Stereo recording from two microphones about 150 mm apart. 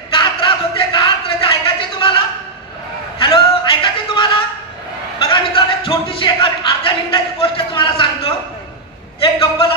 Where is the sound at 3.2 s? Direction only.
35° left (ahead or behind).